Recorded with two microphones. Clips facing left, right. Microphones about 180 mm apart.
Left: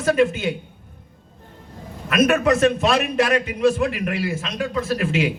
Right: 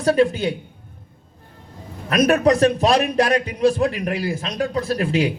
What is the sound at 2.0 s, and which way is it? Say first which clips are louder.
A man's voice: right 1 dB; 35° right (ahead or behind).